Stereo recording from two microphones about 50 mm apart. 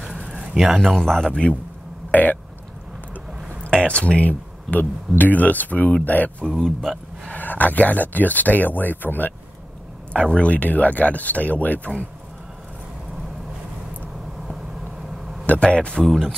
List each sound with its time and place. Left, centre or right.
0.7 s speech: centre
2.0 s burping: left
3.6 s speech: left
6.6 s speech: centre
7.3 s speech: left
10.1 s speech: left
14.5 s vehicle: centre
15.6 s a man's voice: centre
16.0 s speech: centre